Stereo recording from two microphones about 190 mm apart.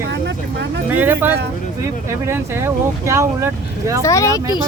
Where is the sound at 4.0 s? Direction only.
15° left (ahead or behind).